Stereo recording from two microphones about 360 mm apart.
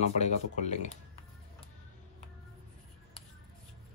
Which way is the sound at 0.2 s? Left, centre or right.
Centre.